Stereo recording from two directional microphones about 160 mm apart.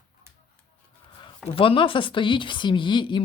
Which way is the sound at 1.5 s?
35° left (ahead or behind).